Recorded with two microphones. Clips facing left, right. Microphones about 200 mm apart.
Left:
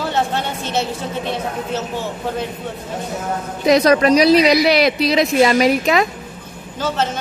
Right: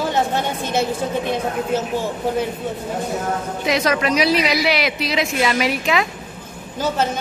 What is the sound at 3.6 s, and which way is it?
A woman's voice, 40° left (ahead or behind).